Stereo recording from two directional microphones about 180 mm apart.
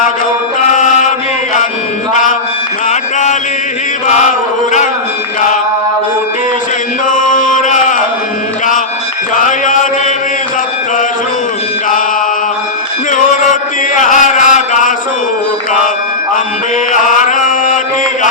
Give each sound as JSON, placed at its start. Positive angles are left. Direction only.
{"t": 2.9, "sound": "mantra", "side_deg": 40}
{"t": 4.1, "sound": "chant", "side_deg": 40}
{"t": 7.1, "sound": "music", "side_deg": 45}
{"t": 9.3, "sound": "mantra", "side_deg": 45}
{"t": 13.9, "sound": "chant", "side_deg": 45}
{"t": 16.9, "sound": "chant", "side_deg": 45}